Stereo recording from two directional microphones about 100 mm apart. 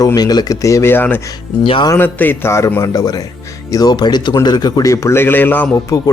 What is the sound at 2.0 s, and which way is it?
A man's voice, 20° left (ahead or behind).